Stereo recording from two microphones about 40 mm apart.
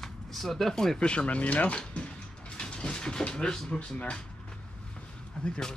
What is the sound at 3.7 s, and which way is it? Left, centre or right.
Speech, left.